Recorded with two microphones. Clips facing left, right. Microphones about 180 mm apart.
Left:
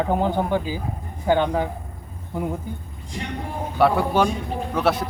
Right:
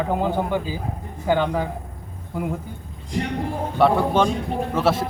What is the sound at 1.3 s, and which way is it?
Speech, 20° left (ahead or behind).